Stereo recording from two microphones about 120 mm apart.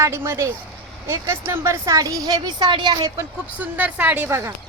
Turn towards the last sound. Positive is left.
turn(degrees=-20)  # may be behind; listen again after turning